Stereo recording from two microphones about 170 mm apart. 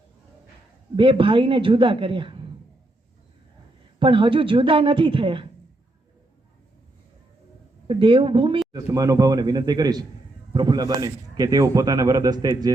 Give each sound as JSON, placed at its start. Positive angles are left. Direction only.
{"t": 0.9, "sound": "speech", "side_deg": -30}
{"t": 4.0, "sound": "speech", "side_deg": -30}
{"t": 7.9, "sound": "speech", "side_deg": -30}
{"t": 8.7, "sound": "speech", "side_deg": -20}